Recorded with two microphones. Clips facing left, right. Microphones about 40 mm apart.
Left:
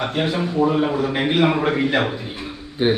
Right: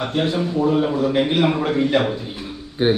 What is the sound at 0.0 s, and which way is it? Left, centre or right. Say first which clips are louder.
A man's voice: right 1 dB; centre.